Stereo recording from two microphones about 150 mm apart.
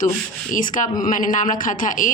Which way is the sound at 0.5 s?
60° left (ahead or behind).